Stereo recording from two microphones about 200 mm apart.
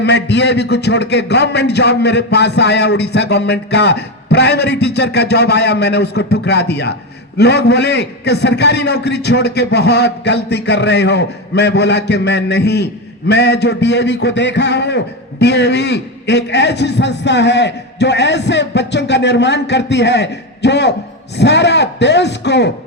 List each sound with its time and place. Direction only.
0.0 s a man's voice: 60° left (ahead or behind)